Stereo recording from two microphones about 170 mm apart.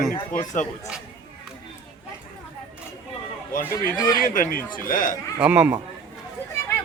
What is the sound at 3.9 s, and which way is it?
Speech, 25° left (ahead or behind).